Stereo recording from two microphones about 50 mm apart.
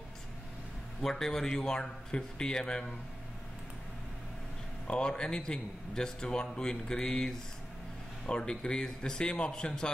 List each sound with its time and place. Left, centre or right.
1.0 s speech: centre
4.8 s speech: centre